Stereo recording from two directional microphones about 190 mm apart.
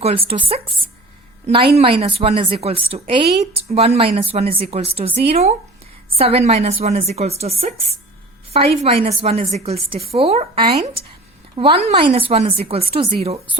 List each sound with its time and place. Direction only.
0.0 s a woman's voice: 30° right (ahead or behind)